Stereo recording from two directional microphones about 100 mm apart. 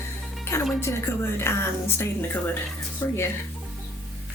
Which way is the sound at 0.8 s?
25° left (ahead or behind).